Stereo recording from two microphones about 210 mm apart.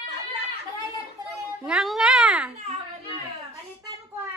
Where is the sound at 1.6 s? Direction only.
Centre (ahead or behind).